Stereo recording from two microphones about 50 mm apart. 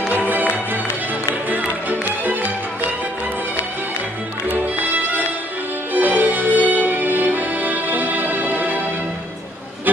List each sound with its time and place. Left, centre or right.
1.9 s music: right
4.5 s music: right